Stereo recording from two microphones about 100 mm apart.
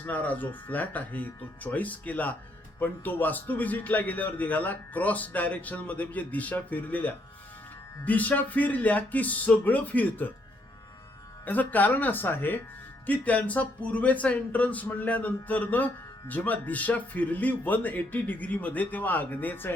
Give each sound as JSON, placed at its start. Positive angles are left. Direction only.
{"t": 0.0, "sound": "a man's voice", "side_deg": 15}
{"t": 11.4, "sound": "a man's voice", "side_deg": 15}